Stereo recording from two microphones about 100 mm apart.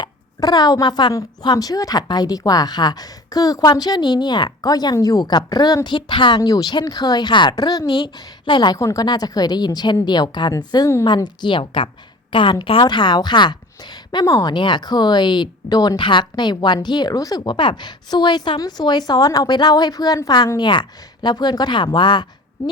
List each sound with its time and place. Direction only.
0.0 s a sound: 40° left (ahead or behind)
1.1 s a woman's voice: 40° left (ahead or behind); by 12.8 s 60° left (ahead or behind)
12.8 s speech: 50° left (ahead or behind)
14.3 s speech: 30° left (ahead or behind)
14.5 s speech: 50° left (ahead or behind)